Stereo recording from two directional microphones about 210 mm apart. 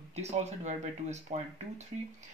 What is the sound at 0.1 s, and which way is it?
Speech, 30° right (ahead or behind).